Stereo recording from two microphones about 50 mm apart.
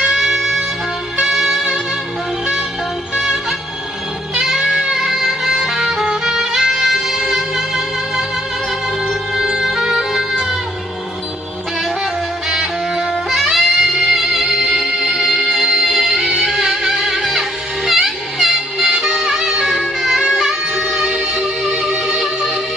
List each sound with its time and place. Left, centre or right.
0.0 s music: centre
3.2 s music: centre
12.4 s music: centre
21.4 s music: right